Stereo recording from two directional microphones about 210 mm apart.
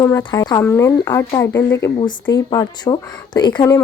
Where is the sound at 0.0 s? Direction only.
20° left (ahead or behind).